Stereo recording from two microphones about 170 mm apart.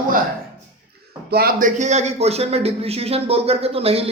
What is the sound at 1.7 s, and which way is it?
Speech, 40° right (ahead or behind).